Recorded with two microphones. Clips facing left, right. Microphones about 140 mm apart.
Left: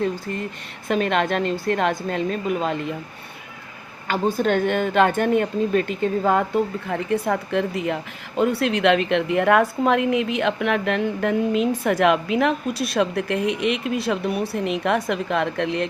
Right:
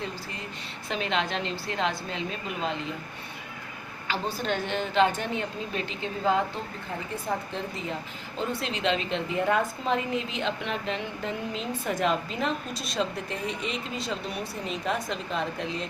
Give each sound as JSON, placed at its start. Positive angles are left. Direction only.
{"t": 0.0, "sound": "a woman's voice", "side_deg": 55}
{"t": 4.0, "sound": "a woman's voice", "side_deg": 50}